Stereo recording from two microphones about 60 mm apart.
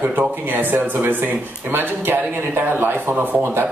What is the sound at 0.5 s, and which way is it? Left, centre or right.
Speech, right.